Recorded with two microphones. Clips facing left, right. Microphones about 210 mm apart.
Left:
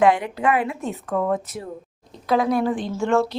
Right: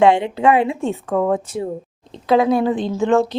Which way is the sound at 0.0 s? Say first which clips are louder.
Right 4 dB; 25° right (ahead or behind).